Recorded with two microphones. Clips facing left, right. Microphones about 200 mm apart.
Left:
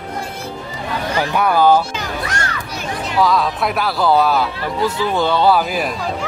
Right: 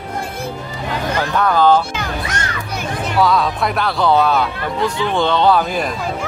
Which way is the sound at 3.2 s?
Centre (ahead or behind).